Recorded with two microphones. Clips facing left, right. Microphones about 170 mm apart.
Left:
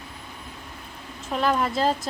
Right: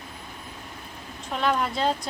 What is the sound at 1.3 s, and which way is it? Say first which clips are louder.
Speech: left 2 dB; centre (ahead or behind).